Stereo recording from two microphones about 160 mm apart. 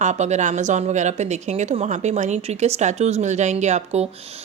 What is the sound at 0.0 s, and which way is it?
A woman's voice, 45° right (ahead or behind).